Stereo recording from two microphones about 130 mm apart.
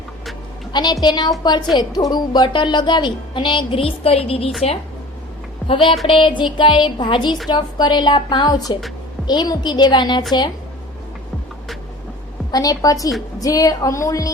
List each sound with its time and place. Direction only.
0.7 s a woman's voice: 35° left (ahead or behind)
5.6 s speech: 40° left (ahead or behind)
12.5 s a woman's voice: 30° left (ahead or behind)